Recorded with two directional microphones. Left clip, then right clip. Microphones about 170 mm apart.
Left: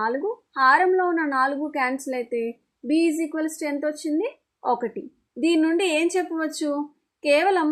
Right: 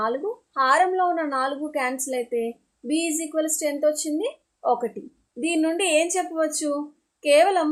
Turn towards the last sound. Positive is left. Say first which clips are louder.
# right 2 dB
turn(degrees=30)  # may be behind; listen again after turning